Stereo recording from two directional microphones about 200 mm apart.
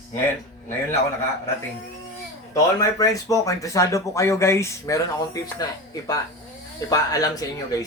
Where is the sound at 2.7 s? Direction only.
15° left (ahead or behind).